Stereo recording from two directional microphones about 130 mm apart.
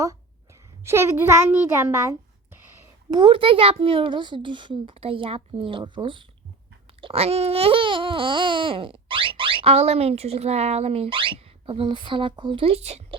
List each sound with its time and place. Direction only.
0.9 s a child's voice: 20° right (ahead or behind)
3.1 s a child's voice: 40° right (ahead or behind)